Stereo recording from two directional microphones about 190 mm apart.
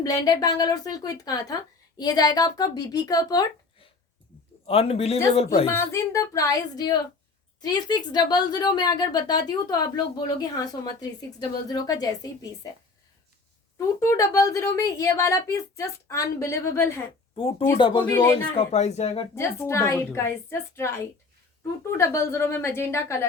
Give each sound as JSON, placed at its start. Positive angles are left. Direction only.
{"t": 0.0, "sound": "speech", "side_deg": 20}
{"t": 4.6, "sound": "a man's voice", "side_deg": 30}
{"t": 5.6, "sound": "a woman's voice", "side_deg": 15}
{"t": 13.7, "sound": "a woman's voice", "side_deg": 15}
{"t": 17.3, "sound": "speech", "side_deg": 30}
{"t": 18.1, "sound": "a woman's voice", "side_deg": 10}
{"t": 18.5, "sound": "a man's voice", "side_deg": 30}
{"t": 19.4, "sound": "a woman's voice", "side_deg": 15}